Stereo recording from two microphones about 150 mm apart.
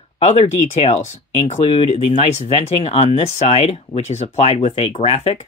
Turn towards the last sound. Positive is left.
turn(degrees=45)  # may be behind; listen again after turning